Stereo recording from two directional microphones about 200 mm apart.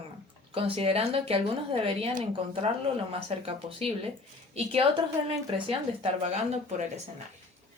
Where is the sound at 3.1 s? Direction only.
30° right (ahead or behind).